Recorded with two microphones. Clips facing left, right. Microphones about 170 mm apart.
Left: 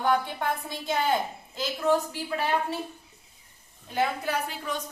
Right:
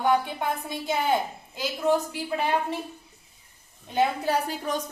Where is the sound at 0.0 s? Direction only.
15° right (ahead or behind).